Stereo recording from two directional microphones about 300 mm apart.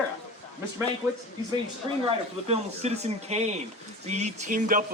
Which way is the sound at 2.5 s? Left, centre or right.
Right.